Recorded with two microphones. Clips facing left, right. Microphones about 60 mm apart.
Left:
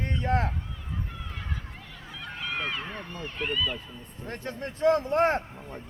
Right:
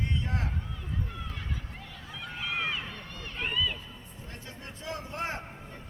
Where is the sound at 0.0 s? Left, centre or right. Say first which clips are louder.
Left 7 dB; left.